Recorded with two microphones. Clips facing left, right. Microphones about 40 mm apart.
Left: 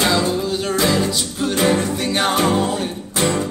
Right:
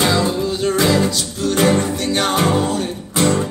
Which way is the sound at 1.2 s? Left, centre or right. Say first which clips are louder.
Even; left.